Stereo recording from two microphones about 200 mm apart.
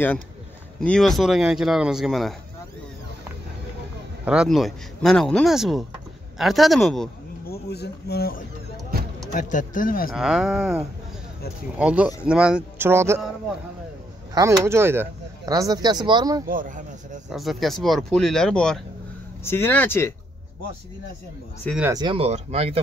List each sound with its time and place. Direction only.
0.7 s speech: 5° left (ahead or behind)
4.2 s speech: 5° right (ahead or behind)
7.4 s speech: 50° left (ahead or behind)
10.1 s speech: 5° right (ahead or behind)
14.3 s speech: 15° right (ahead or behind)
16.4 s speech: 40° right (ahead or behind)
17.3 s speech: centre (ahead or behind)
21.8 s speech: 20° right (ahead or behind)